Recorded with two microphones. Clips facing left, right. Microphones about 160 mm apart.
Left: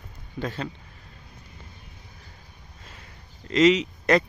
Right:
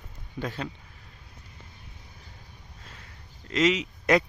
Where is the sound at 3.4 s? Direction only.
Centre (ahead or behind).